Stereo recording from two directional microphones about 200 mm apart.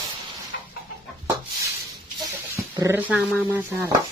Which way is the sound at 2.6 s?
15° right (ahead or behind).